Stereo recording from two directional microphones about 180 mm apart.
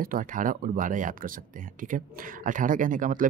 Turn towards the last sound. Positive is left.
turn(degrees=-50)  # may be behind; listen again after turning